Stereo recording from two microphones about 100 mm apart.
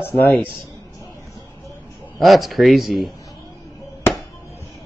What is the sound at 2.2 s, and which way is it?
Speech, centre (ahead or behind).